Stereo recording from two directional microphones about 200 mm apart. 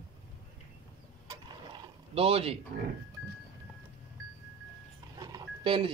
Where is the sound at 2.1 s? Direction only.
30° right (ahead or behind).